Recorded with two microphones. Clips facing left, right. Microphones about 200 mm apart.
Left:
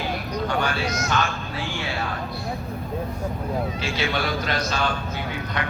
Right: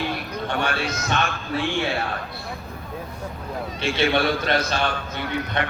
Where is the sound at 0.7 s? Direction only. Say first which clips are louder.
Even; 60° right (ahead or behind).